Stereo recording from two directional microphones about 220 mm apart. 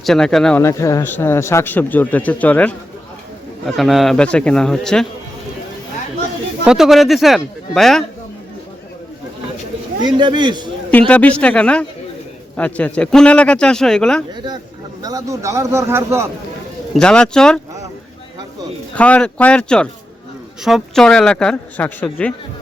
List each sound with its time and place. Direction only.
0.0 s speech: centre (ahead or behind)
6.7 s speech: centre (ahead or behind)
10.1 s a man's voice: 20° right (ahead or behind)
10.9 s speech: 5° left (ahead or behind)
14.3 s a man's voice: 20° right (ahead or behind)
16.9 s speech: 5° left (ahead or behind)
18.9 s speech: 5° left (ahead or behind)